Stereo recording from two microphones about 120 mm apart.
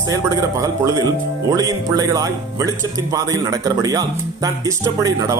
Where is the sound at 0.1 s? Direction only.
25° right (ahead or behind).